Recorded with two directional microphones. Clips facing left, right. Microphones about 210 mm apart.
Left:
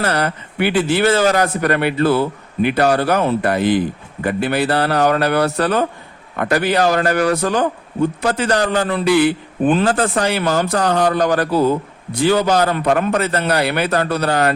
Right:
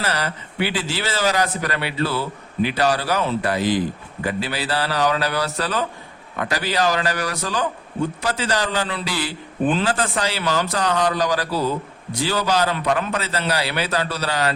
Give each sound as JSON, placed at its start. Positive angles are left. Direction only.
{"t": 0.0, "sound": "a man's voice", "side_deg": 55}